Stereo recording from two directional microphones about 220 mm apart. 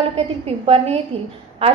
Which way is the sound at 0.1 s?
25° right (ahead or behind).